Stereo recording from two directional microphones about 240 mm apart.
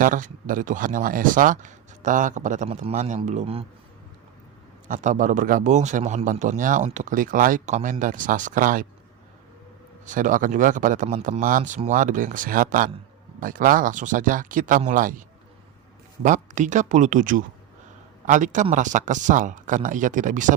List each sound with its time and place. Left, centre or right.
0.0 s a man's voice: right
4.9 s a man's voice: right
10.1 s a man's voice: right
16.2 s a man's voice: right